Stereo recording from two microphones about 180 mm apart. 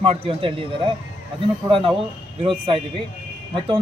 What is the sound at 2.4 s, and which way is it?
Speech, 30° right (ahead or behind).